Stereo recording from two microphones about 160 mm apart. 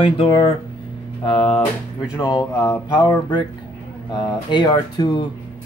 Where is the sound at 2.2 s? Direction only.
25° left (ahead or behind).